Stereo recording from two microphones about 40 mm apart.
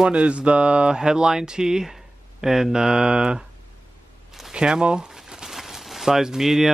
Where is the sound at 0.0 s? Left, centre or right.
Right.